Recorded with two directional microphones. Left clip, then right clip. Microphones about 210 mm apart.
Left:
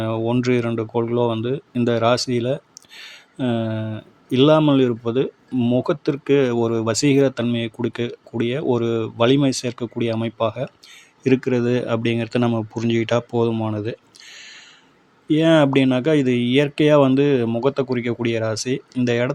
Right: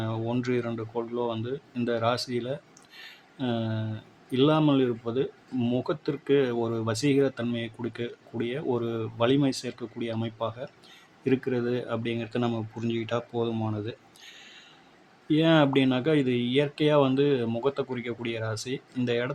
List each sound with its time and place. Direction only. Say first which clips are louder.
0.0 s speech: left 10 dB; 30° left (ahead or behind)